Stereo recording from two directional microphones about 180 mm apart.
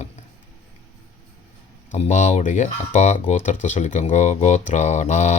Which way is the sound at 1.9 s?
40° left (ahead or behind).